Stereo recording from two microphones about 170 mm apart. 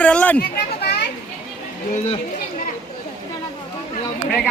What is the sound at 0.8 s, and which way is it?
Children playing, 75° left (ahead or behind).